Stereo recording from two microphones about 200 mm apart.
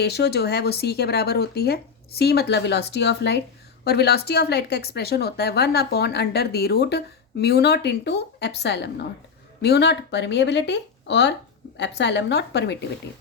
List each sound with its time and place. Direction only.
0.0 s a woman's voice: 55° left (ahead or behind)